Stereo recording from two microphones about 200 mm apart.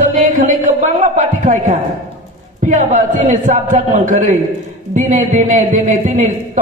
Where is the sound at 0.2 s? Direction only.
40° right (ahead or behind).